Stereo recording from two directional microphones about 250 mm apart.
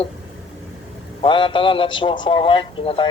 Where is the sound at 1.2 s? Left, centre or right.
Centre.